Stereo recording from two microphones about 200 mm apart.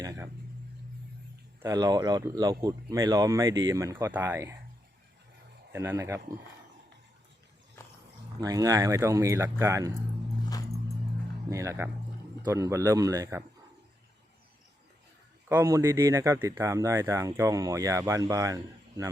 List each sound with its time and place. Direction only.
0.0 s a sound: 15° right (ahead or behind)
1.6 s speech: 20° right (ahead or behind)
5.7 s speech: 10° right (ahead or behind)
8.4 s speech: 20° right (ahead or behind)
11.4 s speech: 15° right (ahead or behind)
15.4 s speech: 15° right (ahead or behind)